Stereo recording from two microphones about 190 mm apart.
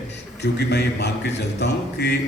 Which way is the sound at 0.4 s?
60° left (ahead or behind).